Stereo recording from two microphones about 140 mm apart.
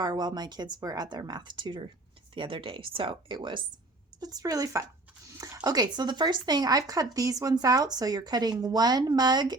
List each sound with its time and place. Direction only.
0.0 s speech: 30° right (ahead or behind)